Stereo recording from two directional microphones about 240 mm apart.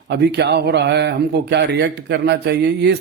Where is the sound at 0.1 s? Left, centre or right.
Right.